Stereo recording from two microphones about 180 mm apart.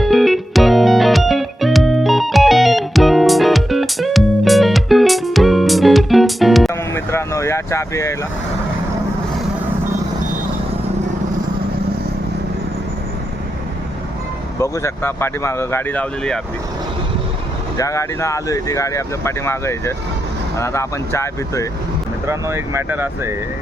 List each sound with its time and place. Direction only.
0.0 s music: centre (ahead or behind)
6.7 s music: 15° left (ahead or behind)
14.6 s speech: 15° left (ahead or behind)
17.7 s speech: 15° left (ahead or behind)
22.3 s speech: 15° right (ahead or behind)